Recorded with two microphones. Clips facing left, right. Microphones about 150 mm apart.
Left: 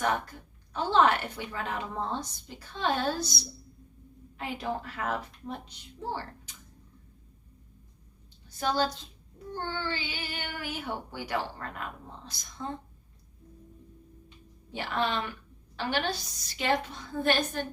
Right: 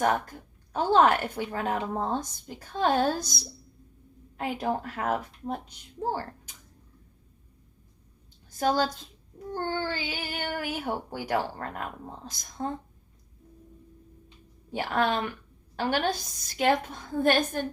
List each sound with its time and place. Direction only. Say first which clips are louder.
0.0 s a woman's voice: right 4 dB; 45° right (ahead or behind)
4.4 s a woman's voice: right 4 dB; 45° right (ahead or behind)
8.4 s a woman's voice: right 3 dB; 45° right (ahead or behind)
14.7 s a woman's voice: right 4 dB; 50° right (ahead or behind)